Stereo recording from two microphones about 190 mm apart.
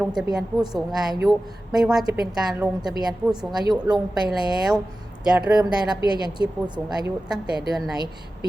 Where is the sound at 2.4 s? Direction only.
10° right (ahead or behind).